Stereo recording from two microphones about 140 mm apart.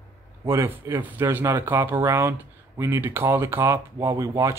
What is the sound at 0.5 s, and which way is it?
Speech, 20° right (ahead or behind).